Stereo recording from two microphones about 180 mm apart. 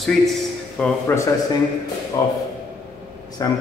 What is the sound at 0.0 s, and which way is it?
Speech, centre (ahead or behind).